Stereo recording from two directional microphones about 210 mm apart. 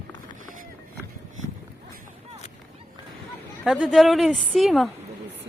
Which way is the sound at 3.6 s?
Centre (ahead or behind).